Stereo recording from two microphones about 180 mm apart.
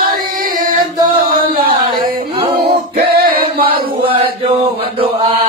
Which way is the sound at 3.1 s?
55° right (ahead or behind).